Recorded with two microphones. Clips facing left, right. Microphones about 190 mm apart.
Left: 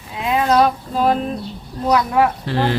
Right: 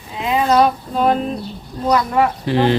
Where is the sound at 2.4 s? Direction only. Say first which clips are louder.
Right 4 dB; 20° right (ahead or behind).